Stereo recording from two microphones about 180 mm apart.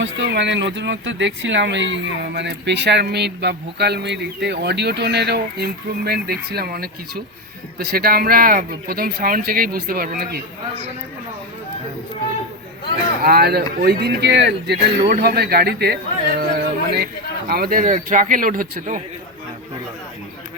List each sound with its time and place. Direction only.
0.0 s speech: 80° right; by 10.4 s 55° right (ahead or behind)
13.2 s speech: 60° right (ahead or behind)
16.4 s yodeling: 60° right (ahead or behind)
17.5 s speech: 55° right (ahead or behind)